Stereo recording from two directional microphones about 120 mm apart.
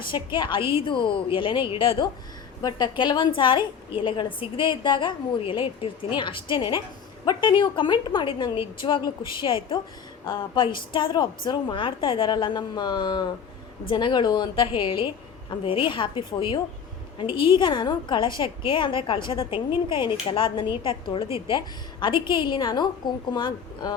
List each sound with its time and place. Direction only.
0.0 s a woman's voice: 40° left (ahead or behind)
2.6 s a woman's voice: 35° left (ahead or behind)